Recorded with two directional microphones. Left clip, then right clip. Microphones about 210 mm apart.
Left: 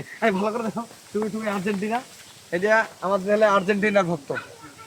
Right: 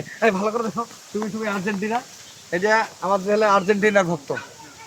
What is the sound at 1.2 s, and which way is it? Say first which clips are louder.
Speech: right 1 dB; centre (ahead or behind).